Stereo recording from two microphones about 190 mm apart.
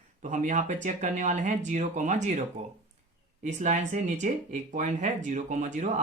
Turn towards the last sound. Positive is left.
turn(degrees=-40)  # may be behind; listen again after turning